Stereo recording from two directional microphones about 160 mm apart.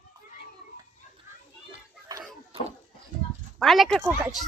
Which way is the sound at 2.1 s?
25° right (ahead or behind).